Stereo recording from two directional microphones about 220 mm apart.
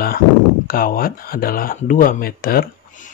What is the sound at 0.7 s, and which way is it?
Speech, 40° left (ahead or behind).